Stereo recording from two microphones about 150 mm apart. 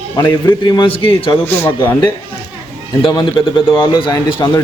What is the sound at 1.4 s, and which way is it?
Speech, 15° left (ahead or behind).